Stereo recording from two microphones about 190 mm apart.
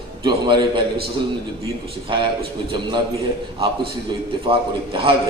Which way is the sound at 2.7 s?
25° right (ahead or behind).